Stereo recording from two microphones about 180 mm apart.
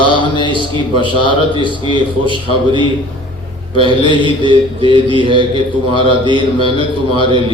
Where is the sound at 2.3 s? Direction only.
25° right (ahead or behind).